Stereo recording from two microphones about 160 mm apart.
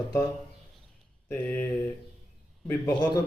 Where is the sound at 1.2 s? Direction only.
15° left (ahead or behind).